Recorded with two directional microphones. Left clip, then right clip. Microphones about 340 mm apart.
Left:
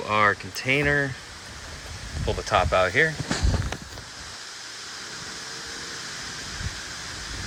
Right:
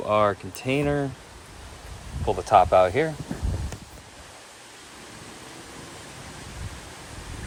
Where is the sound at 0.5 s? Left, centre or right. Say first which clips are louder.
Left 3 dB; centre.